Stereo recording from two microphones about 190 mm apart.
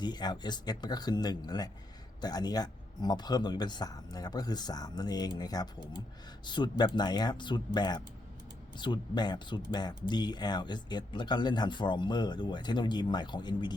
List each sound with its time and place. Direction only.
0.0 s speech: 20° left (ahead or behind)